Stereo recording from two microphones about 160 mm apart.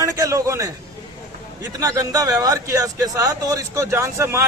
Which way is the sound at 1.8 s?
20° right (ahead or behind).